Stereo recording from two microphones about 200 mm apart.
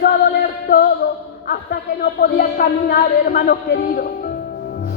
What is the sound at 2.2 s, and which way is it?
Speech, 50° left (ahead or behind).